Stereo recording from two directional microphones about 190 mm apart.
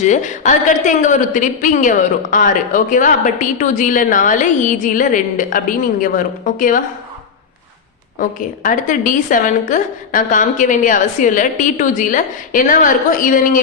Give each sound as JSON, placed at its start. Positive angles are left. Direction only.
{"t": 0.0, "sound": "a woman's voice", "side_deg": 40}
{"t": 8.2, "sound": "a woman's voice", "side_deg": 45}